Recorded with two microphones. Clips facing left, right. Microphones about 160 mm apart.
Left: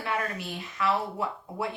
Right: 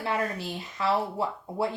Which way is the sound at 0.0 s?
30° right (ahead or behind).